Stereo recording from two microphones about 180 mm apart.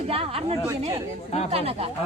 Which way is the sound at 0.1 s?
30° right (ahead or behind).